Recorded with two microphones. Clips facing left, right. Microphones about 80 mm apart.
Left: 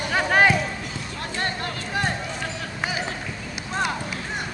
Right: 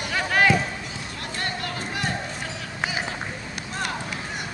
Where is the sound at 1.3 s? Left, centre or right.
Left.